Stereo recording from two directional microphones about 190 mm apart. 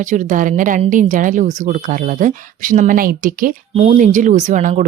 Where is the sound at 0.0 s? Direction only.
40° right (ahead or behind).